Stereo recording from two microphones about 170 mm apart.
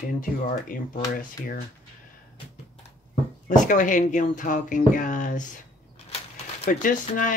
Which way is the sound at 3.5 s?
50° left (ahead or behind).